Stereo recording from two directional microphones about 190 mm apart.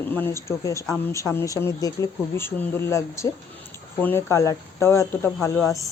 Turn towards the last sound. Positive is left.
turn(degrees=10)  # may be behind; listen again after turning